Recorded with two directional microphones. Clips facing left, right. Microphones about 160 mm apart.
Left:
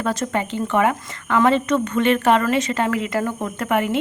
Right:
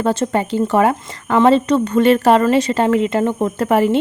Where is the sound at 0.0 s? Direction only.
30° right (ahead or behind).